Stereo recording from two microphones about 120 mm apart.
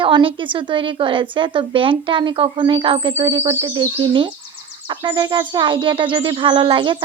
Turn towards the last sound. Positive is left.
turn(degrees=-40)  # may be behind; listen again after turning